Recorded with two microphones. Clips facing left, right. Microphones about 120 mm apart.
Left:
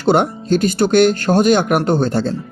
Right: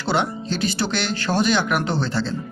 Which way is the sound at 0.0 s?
50° left (ahead or behind).